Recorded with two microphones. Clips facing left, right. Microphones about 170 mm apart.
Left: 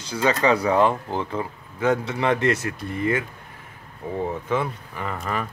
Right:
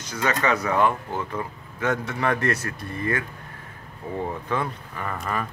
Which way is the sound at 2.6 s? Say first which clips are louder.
Left 4 dB; 10° left (ahead or behind).